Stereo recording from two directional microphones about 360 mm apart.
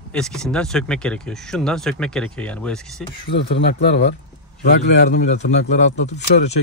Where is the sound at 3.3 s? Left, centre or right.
Left.